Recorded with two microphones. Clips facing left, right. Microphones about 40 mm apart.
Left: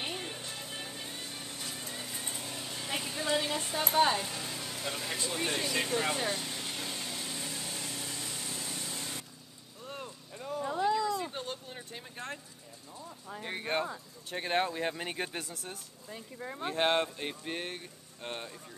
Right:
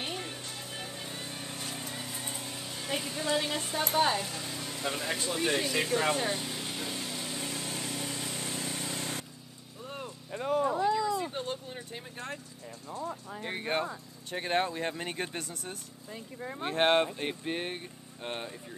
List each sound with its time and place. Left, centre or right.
0.1 s music: centre
1.4 s vehicle: right
1.9 s a sound: centre
5.5 s speech: right
6.1 s vehicle: centre
7.3 s a sound: centre
8.0 s vehicle: right
9.8 s vehicle: centre
10.3 s a sound: right
10.8 s vehicle: centre
12.9 s a sound: right
13.3 s speech: centre
16.6 s speech: centre